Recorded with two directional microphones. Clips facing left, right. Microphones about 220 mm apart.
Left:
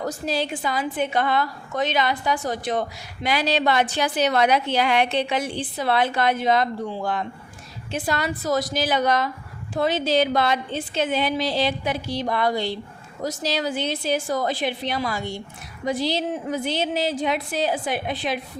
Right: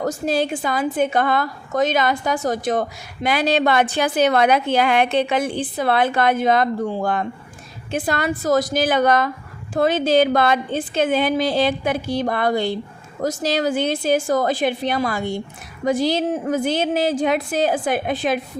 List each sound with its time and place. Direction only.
0.0 s a woman's voice: 50° right (ahead or behind)